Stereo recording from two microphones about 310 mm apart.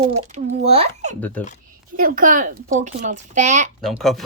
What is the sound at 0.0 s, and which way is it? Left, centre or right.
Speech, right.